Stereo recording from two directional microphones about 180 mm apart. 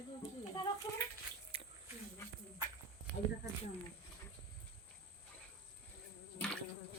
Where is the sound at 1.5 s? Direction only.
30° right (ahead or behind).